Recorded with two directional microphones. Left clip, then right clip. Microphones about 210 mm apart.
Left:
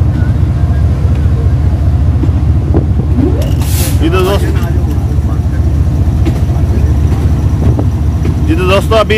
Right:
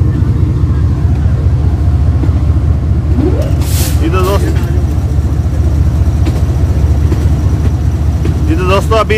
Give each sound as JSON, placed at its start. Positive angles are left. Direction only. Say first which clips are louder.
{"t": 4.0, "sound": "vehicle", "louder": "left 2 dB", "side_deg": 10}
{"t": 8.5, "sound": "vehicle", "louder": "left 2 dB", "side_deg": 5}